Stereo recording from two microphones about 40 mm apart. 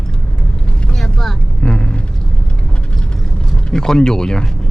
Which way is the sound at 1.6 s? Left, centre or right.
Centre.